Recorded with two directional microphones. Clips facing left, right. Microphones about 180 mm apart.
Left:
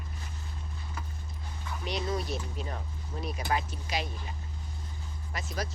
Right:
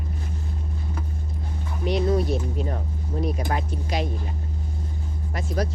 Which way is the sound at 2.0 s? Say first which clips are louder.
Right 11 dB; 55° right (ahead or behind).